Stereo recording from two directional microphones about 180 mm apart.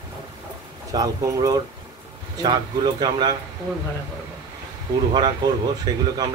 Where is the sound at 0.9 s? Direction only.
20° right (ahead or behind).